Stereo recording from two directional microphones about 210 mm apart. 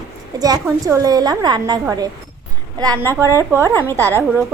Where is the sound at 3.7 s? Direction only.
10° left (ahead or behind).